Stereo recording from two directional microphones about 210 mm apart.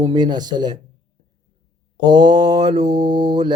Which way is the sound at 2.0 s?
20° right (ahead or behind).